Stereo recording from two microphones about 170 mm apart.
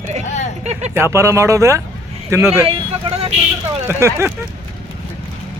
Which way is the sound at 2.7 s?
35° right (ahead or behind).